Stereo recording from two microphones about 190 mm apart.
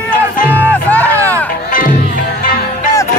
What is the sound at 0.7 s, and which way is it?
Music, 10° left (ahead or behind).